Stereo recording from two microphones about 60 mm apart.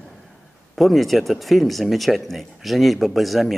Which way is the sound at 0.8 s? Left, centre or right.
Centre.